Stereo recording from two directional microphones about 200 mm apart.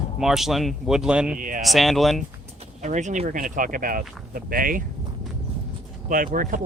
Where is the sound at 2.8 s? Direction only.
35° right (ahead or behind).